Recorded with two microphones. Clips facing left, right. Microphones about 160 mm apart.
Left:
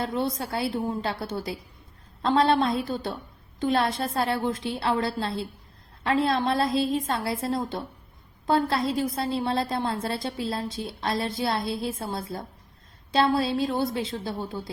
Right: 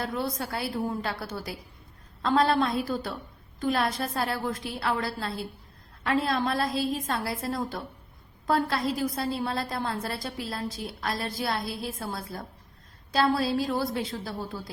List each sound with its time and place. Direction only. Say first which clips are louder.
0.0 s a woman's voice: left 3 dB; 25° left (ahead or behind)